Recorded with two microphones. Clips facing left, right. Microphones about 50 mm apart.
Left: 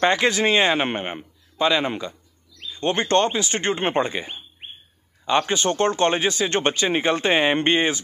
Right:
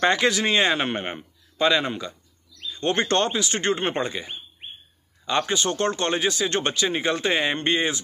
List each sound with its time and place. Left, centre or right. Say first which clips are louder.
0.0 s a man's voice: left 2 dB; centre
3.3 s speech: left 1 dB; left
5.2 s speech: left 3 dB; centre